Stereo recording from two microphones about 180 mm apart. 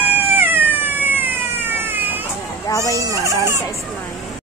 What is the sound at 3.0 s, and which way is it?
Speech, 20° right (ahead or behind).